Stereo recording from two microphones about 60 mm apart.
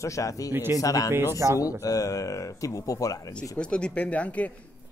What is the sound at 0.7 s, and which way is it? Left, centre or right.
Speech, left.